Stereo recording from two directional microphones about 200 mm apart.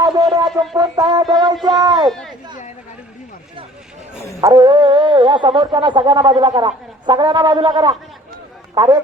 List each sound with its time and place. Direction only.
0.0 s music: 20° right (ahead or behind)
0.8 s speech: 20° right (ahead or behind)
2.0 s speech: centre (ahead or behind)
4.4 s speech: 20° right (ahead or behind)